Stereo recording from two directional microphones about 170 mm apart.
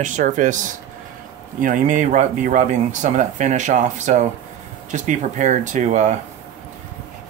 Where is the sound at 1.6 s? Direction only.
50° right (ahead or behind).